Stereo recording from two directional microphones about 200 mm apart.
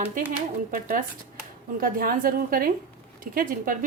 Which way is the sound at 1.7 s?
45° right (ahead or behind).